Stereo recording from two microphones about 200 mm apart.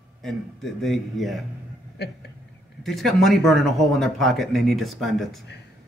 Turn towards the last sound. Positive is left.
turn(degrees=0)  # may be behind; listen again after turning